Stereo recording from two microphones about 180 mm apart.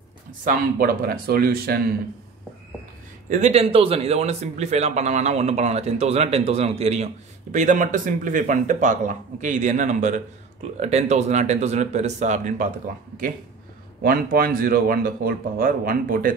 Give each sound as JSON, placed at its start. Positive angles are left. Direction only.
{"t": 0.5, "sound": "speech", "side_deg": -55}
{"t": 3.3, "sound": "a man's voice", "side_deg": -40}
{"t": 14.0, "sound": "speech", "side_deg": -55}